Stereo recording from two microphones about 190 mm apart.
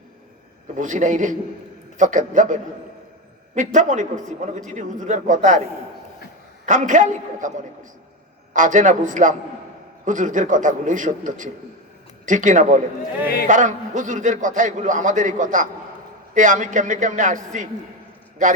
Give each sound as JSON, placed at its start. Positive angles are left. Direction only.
{"t": 0.8, "sound": "a man's voice", "side_deg": -40}
{"t": 6.7, "sound": "a man's voice", "side_deg": -40}
{"t": 13.2, "sound": "speech", "side_deg": 55}
{"t": 13.5, "sound": "a man's voice", "side_deg": -40}